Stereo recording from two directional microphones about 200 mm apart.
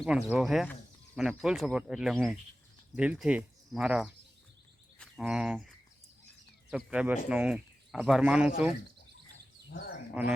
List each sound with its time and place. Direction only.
0.0 s speech: 5° right (ahead or behind)
5.2 s speech: 5° right (ahead or behind)
9.7 s speech: 50° left (ahead or behind)